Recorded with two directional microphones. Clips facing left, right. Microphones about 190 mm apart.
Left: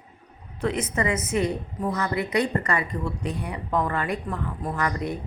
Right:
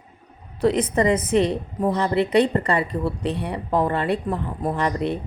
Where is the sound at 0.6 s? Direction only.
35° right (ahead or behind).